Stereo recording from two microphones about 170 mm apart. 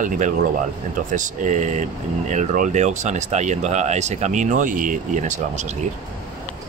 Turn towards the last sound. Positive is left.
turn(degrees=-45)  # may be behind; listen again after turning